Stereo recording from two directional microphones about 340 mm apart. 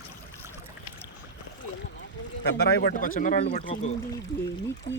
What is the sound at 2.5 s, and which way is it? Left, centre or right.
Speech, left.